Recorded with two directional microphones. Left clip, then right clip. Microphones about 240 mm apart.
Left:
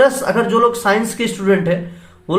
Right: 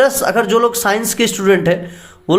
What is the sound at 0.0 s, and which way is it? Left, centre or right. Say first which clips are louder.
Speech: even; right.